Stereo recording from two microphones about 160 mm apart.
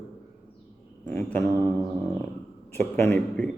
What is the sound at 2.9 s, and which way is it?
Speech, 10° left (ahead or behind).